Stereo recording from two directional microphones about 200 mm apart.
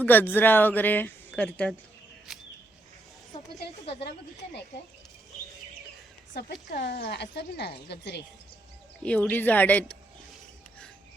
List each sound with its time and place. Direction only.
0.0 s speech: 10° left (ahead or behind)
6.3 s a woman's voice: 50° left (ahead or behind)
9.0 s speech: 10° left (ahead or behind)